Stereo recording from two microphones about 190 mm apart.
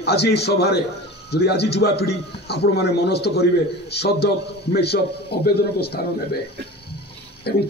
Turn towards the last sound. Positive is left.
turn(degrees=55)  # may be behind; listen again after turning